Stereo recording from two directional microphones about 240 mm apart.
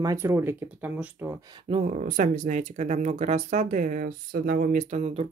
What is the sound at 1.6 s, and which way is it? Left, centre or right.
Speech, right.